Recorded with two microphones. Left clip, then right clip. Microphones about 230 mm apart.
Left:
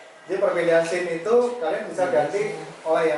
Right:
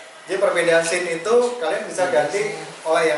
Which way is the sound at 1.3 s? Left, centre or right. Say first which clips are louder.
Right 2 dB; centre.